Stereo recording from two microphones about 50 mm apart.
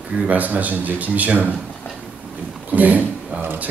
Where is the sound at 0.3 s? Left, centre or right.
Right.